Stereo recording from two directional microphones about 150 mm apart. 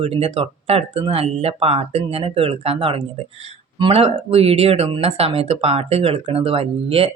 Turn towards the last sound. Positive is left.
turn(degrees=-40)  # may be behind; listen again after turning